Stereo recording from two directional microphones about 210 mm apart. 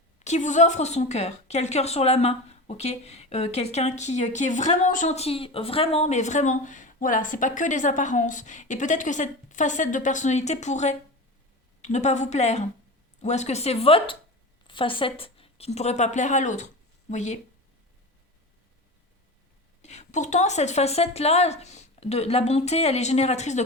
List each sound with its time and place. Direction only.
0.3 s a woman's voice: 35° left (ahead or behind)
19.8 s a woman's voice: 35° left (ahead or behind)